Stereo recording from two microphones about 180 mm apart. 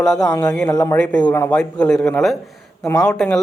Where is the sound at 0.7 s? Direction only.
20° left (ahead or behind).